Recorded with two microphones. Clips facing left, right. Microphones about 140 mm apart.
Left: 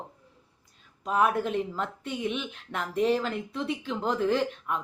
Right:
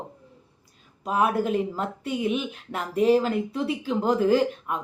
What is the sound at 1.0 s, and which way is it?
Speech, 5° right (ahead or behind).